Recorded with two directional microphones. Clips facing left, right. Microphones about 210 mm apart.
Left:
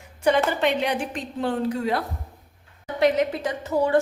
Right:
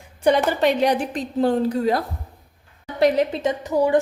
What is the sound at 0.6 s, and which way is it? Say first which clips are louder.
A woman's voice: right 4 dB; 40° right (ahead or behind).